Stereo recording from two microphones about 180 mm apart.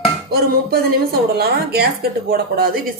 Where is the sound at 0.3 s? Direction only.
60° right (ahead or behind).